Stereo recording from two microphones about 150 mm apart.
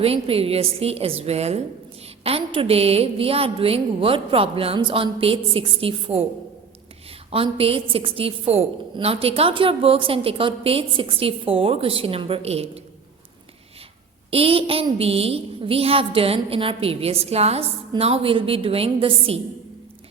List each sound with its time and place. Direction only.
0.0 s a woman's voice: 40° right (ahead or behind)
7.3 s a woman's voice: 40° right (ahead or behind)
14.3 s a woman's voice: 40° right (ahead or behind)